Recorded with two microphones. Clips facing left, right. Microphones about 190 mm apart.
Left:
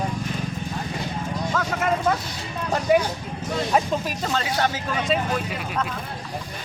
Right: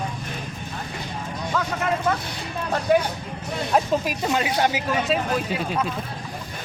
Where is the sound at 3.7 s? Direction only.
10° right (ahead or behind).